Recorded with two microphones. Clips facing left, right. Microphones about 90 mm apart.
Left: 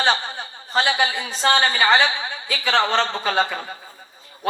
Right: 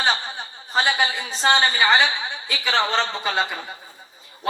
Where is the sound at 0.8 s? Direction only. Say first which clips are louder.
Left 1 dB; 45° left (ahead or behind).